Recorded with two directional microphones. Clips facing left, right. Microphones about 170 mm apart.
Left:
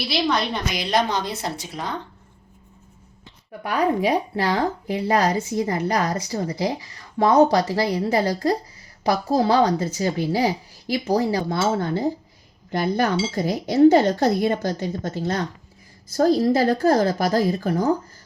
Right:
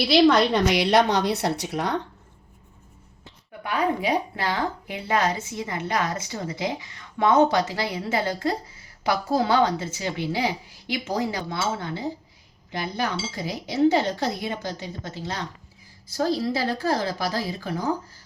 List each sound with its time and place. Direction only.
0.3 s a woman's voice: 70° right (ahead or behind)
3.6 s a woman's voice: 35° left (ahead or behind)